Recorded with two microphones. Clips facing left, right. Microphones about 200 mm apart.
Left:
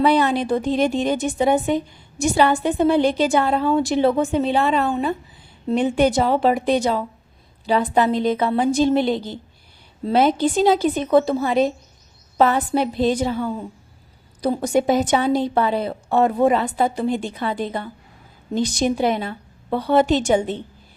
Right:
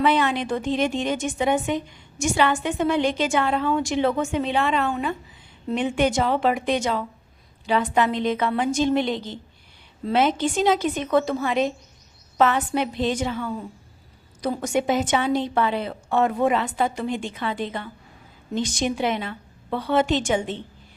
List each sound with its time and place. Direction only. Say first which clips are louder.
0.0 s a woman's voice: left 4 dB; 35° left (ahead or behind)